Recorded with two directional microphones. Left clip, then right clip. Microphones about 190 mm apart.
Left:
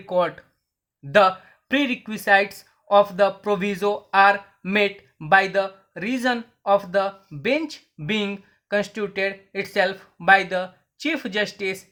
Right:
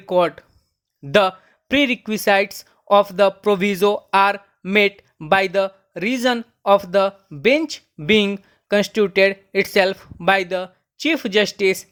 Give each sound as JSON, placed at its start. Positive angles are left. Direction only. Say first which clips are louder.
{"t": 0.0, "sound": "speech", "louder": "right 4 dB", "side_deg": -35}